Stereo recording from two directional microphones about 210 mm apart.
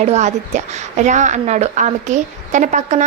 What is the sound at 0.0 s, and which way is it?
A woman's voice, 35° right (ahead or behind).